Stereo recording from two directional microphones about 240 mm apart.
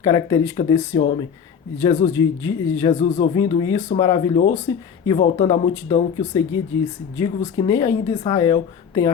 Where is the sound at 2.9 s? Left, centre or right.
Left.